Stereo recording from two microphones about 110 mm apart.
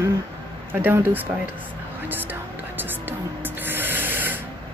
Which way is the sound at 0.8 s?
15° right (ahead or behind).